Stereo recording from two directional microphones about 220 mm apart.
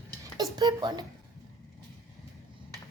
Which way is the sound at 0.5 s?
15° right (ahead or behind).